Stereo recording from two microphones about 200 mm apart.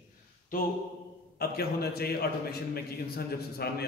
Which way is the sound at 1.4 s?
50° left (ahead or behind).